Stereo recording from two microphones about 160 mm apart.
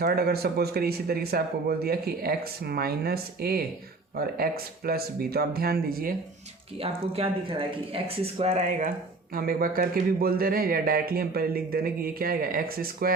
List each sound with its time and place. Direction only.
0.0 s a man's voice: 75° right (ahead or behind)
4.9 s a man's voice: 75° right (ahead or behind)
6.8 s speech: 40° right (ahead or behind)
9.3 s a man's voice: 65° right (ahead or behind)